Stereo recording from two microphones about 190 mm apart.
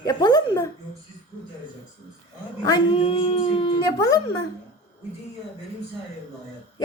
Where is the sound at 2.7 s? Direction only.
25° left (ahead or behind).